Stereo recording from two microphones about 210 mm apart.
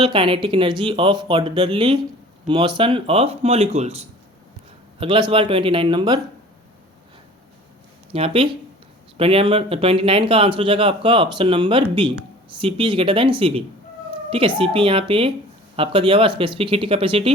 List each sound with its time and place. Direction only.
0.0 s speech: 25° right (ahead or behind)
4.9 s speech: 25° right (ahead or behind)
8.1 s speech: 25° right (ahead or behind)